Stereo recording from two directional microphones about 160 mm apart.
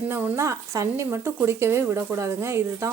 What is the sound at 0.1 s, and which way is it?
Speech, 10° right (ahead or behind).